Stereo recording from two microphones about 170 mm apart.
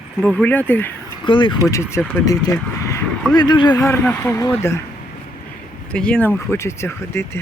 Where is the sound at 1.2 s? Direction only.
30° left (ahead or behind).